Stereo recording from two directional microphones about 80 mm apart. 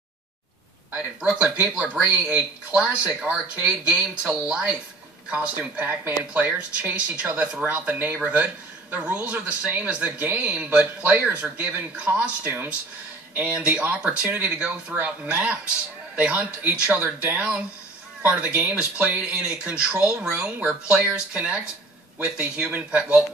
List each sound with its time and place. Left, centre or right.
1.2 s speech: centre
22.7 s speech: centre